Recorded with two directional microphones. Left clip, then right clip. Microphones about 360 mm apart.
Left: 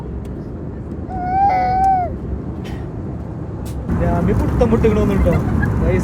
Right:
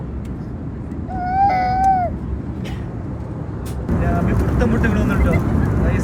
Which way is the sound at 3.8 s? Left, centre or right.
Centre.